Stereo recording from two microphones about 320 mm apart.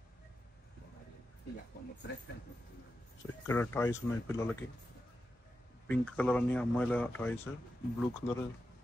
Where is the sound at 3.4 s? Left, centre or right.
Centre.